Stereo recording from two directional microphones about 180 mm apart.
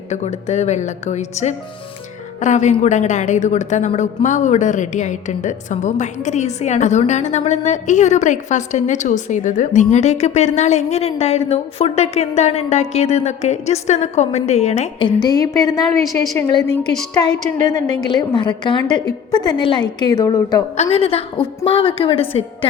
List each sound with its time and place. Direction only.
0.1 s a woman's voice: 40° left (ahead or behind); by 20.7 s 20° left (ahead or behind)
20.7 s a woman's voice: 35° left (ahead or behind)